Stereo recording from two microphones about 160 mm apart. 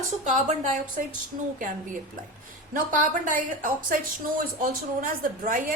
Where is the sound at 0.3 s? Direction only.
50° right (ahead or behind).